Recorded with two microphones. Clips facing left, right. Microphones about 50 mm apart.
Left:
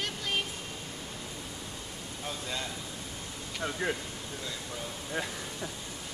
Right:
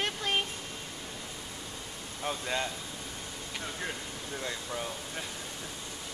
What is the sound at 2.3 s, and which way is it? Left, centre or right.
Speech, right.